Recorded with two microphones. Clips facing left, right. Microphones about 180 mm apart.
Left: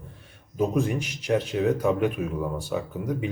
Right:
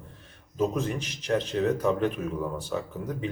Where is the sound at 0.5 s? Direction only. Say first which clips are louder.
Left 3 dB; 10° left (ahead or behind).